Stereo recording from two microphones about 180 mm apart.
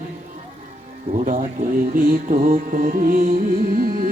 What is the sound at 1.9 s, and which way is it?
Music, 50° right (ahead or behind).